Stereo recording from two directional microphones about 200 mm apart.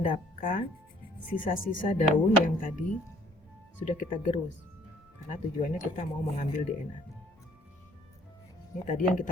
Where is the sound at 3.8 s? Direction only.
40° left (ahead or behind).